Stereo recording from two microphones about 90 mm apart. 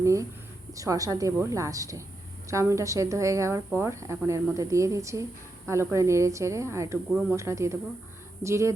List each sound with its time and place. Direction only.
0.0 s a woman's voice: 35° right (ahead or behind)